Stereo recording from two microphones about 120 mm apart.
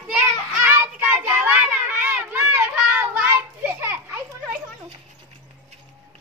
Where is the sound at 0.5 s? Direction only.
15° right (ahead or behind).